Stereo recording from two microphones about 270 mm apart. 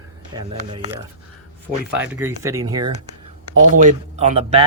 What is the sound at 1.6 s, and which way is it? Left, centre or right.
Speech, centre.